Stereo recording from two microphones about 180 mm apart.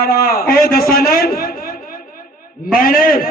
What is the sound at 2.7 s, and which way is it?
Speech, 55° left (ahead or behind).